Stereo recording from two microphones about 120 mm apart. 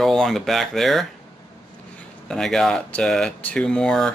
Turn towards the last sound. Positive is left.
turn(degrees=5)  # may be behind; listen again after turning